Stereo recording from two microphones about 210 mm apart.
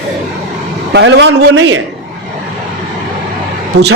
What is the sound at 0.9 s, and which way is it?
Speech, 55° right (ahead or behind).